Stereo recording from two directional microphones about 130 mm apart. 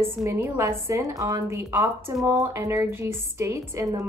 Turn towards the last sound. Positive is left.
turn(degrees=-20)  # may be behind; listen again after turning